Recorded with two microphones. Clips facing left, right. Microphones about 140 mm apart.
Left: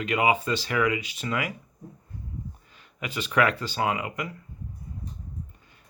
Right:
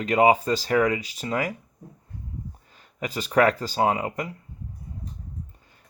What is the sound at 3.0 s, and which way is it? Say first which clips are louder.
Speech: right 4 dB; 40° right (ahead or behind).